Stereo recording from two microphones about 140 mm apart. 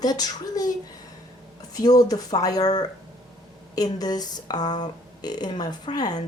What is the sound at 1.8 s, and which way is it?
Speech, 25° left (ahead or behind).